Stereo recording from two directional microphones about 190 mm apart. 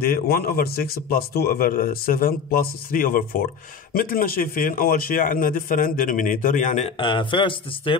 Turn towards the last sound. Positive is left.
turn(degrees=25)  # may be behind; listen again after turning